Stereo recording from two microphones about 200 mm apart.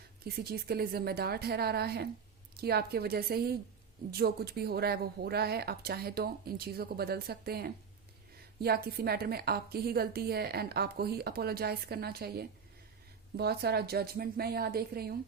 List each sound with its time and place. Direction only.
0.3 s a woman's voice: 50° right (ahead or behind)